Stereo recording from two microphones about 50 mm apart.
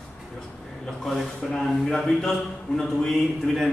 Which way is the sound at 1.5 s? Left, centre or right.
Centre.